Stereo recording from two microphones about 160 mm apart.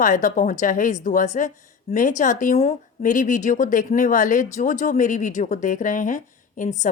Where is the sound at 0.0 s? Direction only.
55° left (ahead or behind).